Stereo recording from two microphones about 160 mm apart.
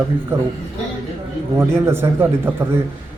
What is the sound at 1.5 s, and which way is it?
Speech, 15° right (ahead or behind).